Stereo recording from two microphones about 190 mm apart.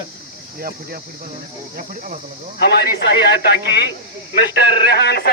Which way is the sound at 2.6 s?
60° left (ahead or behind).